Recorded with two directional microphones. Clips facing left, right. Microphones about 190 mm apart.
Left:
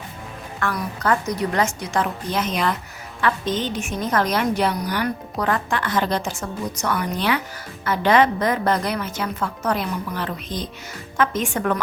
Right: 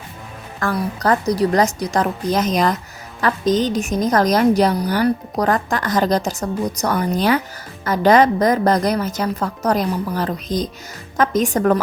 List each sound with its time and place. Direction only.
0.6 s a woman's voice: 35° right (ahead or behind)